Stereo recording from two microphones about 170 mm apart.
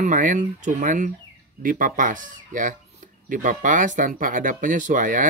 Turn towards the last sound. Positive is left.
turn(degrees=-50)  # may be behind; listen again after turning